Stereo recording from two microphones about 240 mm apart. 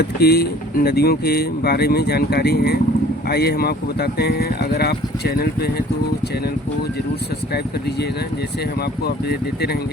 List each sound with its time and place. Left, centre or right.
0.0 s speech: left
9.0 s speech: left